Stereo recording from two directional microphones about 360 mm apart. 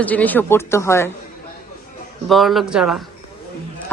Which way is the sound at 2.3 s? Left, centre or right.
Centre.